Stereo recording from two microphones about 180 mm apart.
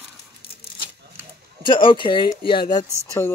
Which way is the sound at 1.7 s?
25° left (ahead or behind).